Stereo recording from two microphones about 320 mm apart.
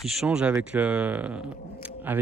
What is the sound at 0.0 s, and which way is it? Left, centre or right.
Speech, centre.